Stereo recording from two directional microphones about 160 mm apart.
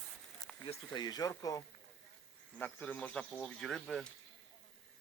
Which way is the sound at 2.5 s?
10° left (ahead or behind).